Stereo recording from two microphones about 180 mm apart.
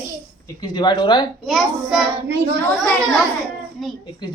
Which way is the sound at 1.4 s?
Centre (ahead or behind).